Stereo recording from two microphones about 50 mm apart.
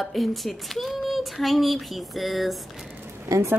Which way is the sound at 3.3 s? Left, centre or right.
Right.